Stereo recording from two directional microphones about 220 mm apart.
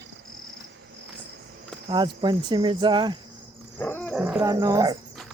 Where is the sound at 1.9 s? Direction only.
20° right (ahead or behind).